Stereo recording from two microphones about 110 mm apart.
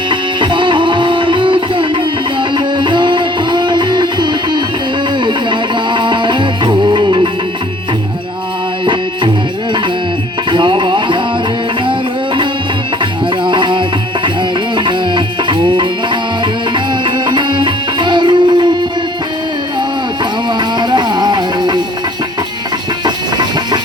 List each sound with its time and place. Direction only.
0.1 s music: 45° right (ahead or behind)
10.5 s music: 45° right (ahead or behind)
17.2 s music: 45° right (ahead or behind)
20.6 s music: 40° right (ahead or behind)
23.0 s a sound: 40° right (ahead or behind)